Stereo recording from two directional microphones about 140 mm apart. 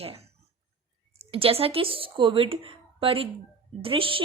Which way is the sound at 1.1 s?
40° right (ahead or behind).